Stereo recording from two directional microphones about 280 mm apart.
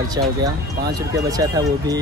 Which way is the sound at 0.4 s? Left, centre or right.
Centre.